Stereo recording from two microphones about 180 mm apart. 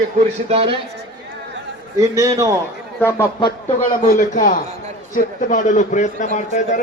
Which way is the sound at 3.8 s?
45° left (ahead or behind).